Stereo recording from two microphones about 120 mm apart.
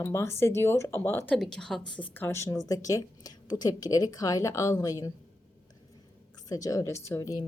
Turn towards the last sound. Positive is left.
turn(degrees=25)  # may be behind; listen again after turning